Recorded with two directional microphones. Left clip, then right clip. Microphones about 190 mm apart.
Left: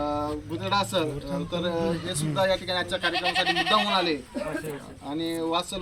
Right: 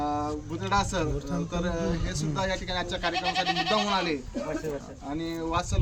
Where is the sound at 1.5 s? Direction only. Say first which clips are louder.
Left 4 dB; 10° right (ahead or behind).